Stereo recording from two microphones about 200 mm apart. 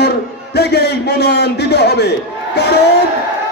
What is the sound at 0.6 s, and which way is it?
A man's voice, 55° left (ahead or behind).